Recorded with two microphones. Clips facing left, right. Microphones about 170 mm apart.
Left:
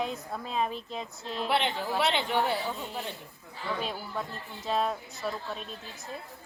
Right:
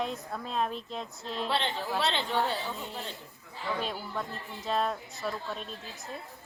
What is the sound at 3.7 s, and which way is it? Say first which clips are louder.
A woman's voice: even; centre (ahead or behind).